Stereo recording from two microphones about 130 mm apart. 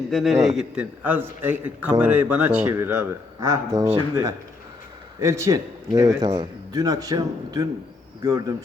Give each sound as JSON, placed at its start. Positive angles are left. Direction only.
{"t": 0.1, "sound": "a man's voice", "side_deg": 0}
{"t": 1.0, "sound": "a man's voice", "side_deg": -15}
{"t": 3.4, "sound": "a man's voice", "side_deg": -25}